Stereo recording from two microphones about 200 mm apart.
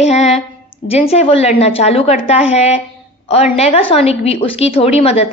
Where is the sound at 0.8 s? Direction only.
30° left (ahead or behind).